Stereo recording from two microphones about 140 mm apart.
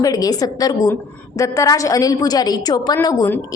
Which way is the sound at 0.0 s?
25° left (ahead or behind).